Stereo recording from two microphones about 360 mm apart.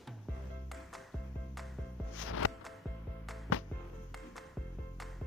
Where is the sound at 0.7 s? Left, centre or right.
Centre.